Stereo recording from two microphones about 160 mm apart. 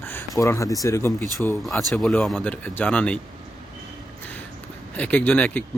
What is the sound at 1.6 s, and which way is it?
Speech, centre (ahead or behind).